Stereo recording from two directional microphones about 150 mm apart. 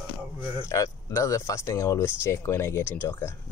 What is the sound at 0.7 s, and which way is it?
Speech, 20° left (ahead or behind).